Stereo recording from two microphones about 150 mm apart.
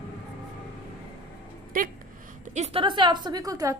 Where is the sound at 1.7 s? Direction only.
70° right (ahead or behind).